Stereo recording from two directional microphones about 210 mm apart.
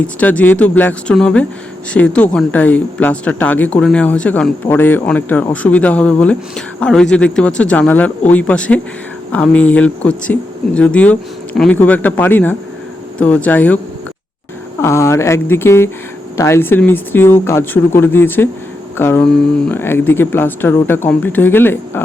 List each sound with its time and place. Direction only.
0.0 s speech: 5° left (ahead or behind)
14.8 s speech: 15° left (ahead or behind)